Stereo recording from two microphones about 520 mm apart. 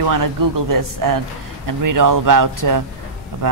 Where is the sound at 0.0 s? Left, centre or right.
Right.